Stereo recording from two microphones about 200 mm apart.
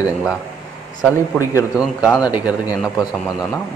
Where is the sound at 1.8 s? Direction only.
20° left (ahead or behind).